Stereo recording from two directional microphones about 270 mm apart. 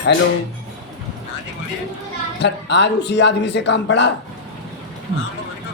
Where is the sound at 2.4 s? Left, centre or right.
Left.